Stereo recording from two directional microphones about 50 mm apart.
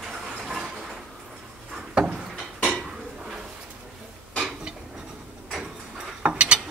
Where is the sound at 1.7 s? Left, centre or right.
Centre.